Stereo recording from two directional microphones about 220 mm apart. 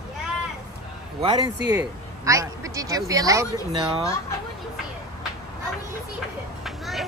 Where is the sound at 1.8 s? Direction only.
15° right (ahead or behind).